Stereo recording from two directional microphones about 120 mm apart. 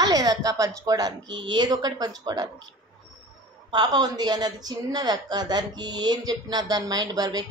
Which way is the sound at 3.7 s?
35° right (ahead or behind).